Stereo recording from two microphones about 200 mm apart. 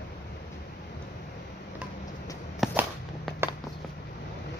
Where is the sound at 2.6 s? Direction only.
Centre (ahead or behind).